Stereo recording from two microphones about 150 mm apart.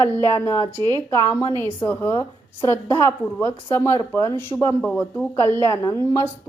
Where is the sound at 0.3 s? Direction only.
20° left (ahead or behind).